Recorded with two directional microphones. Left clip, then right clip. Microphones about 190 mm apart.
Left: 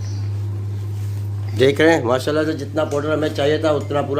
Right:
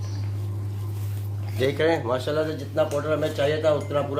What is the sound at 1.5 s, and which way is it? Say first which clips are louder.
Speech: left 8 dB; 55° left (ahead or behind).